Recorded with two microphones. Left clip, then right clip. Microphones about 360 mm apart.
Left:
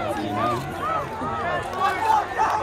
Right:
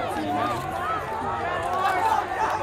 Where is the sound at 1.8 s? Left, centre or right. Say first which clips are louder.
Left 3 dB; centre.